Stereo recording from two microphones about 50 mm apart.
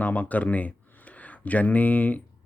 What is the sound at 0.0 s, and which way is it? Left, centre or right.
Speech, left.